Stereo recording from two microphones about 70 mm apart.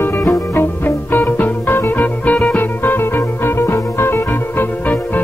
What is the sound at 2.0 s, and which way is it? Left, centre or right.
Music, centre.